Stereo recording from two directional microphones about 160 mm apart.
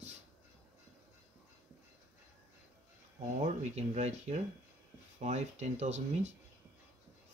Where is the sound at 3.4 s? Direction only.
45° right (ahead or behind).